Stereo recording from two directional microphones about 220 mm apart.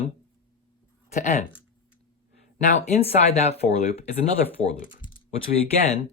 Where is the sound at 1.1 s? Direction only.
30° left (ahead or behind).